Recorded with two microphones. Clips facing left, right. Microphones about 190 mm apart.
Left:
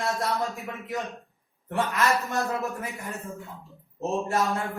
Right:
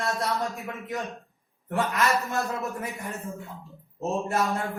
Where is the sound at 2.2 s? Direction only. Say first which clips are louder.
Left 1 dB; centre (ahead or behind).